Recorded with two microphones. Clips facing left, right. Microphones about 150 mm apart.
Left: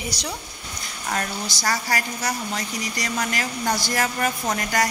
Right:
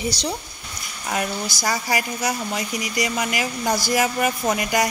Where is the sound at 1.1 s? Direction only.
10° right (ahead or behind).